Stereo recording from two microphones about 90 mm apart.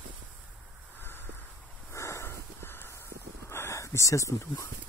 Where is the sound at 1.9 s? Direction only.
30° left (ahead or behind).